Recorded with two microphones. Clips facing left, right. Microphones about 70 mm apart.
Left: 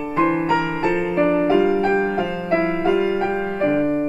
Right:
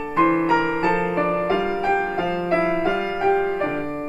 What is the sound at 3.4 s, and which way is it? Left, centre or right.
Music, centre.